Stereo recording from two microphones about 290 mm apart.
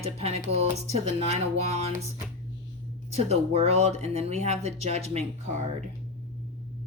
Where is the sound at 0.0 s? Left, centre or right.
Right.